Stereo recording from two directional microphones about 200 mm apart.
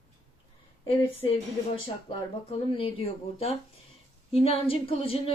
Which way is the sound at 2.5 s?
30° left (ahead or behind).